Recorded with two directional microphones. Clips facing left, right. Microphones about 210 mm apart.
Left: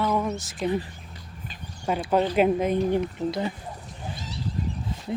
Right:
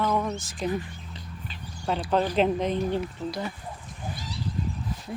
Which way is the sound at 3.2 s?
40° left (ahead or behind).